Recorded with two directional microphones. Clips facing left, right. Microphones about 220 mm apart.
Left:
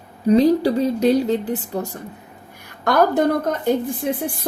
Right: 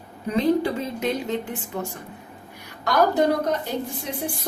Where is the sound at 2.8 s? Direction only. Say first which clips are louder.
Left 3 dB; 55° left (ahead or behind).